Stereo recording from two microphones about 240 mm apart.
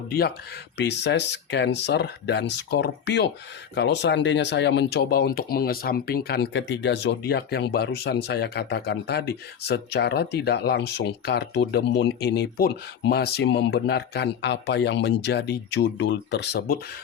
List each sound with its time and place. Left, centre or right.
0.1 s speech: left